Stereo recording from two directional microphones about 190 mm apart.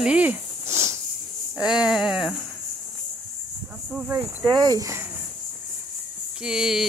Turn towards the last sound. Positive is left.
turn(degrees=0)  # may be behind; listen again after turning